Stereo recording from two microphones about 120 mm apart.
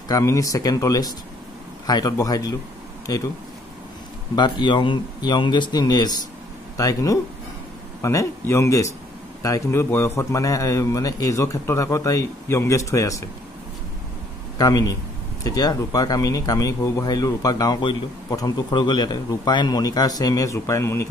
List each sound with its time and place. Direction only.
0.1 s a man's voice: 25° left (ahead or behind)
4.4 s a man's voice: 40° left (ahead or behind)
14.6 s a man's voice: 30° left (ahead or behind)